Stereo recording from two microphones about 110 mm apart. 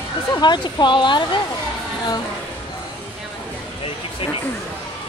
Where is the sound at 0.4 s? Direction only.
40° left (ahead or behind).